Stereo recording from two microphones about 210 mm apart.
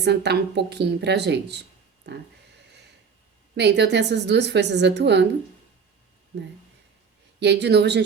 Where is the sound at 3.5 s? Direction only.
55° right (ahead or behind).